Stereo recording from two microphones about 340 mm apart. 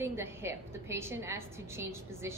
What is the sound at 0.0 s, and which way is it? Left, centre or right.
A woman's voice, centre.